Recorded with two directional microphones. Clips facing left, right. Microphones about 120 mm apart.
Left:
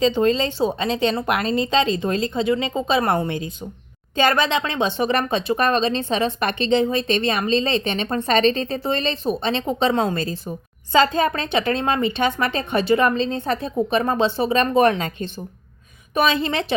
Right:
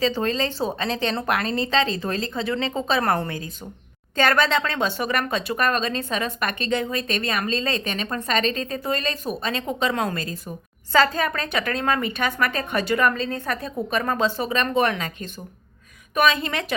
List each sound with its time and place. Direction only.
0.0 s a woman's voice: 20° left (ahead or behind)